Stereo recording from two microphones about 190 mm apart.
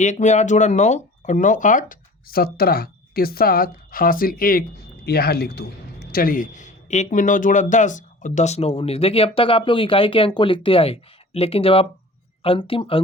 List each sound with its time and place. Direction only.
0.0 s a man's voice: 40° left (ahead or behind)